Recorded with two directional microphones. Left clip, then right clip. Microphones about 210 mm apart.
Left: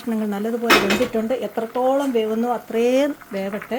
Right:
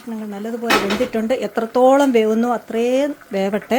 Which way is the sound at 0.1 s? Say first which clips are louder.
Left 5 dB; 20° left (ahead or behind).